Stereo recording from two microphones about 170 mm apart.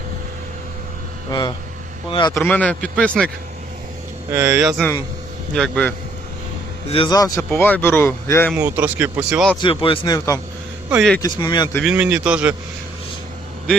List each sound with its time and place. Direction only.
1.3 s a man's voice: 25° left (ahead or behind)
2.4 s speech: 10° left (ahead or behind)
4.3 s speech: 15° right (ahead or behind)
4.6 s a man's voice: centre (ahead or behind)
6.9 s speech: 25° left (ahead or behind)
8.5 s speech: 10° right (ahead or behind)
9.6 s a man's voice: 30° left (ahead or behind)
11.8 s speech: 5° right (ahead or behind)